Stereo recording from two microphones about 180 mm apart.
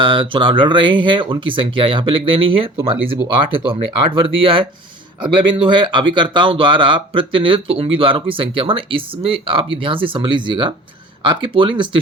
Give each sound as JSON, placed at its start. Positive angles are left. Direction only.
{"t": 0.0, "sound": "speech", "side_deg": -30}